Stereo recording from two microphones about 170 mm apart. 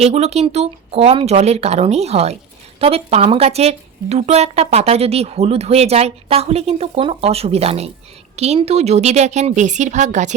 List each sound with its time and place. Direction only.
0.0 s a woman's voice: 40° right (ahead or behind)